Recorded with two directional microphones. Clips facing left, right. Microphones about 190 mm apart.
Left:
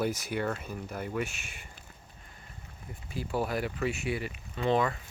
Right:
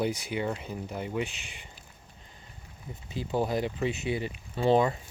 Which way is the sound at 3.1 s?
20° right (ahead or behind).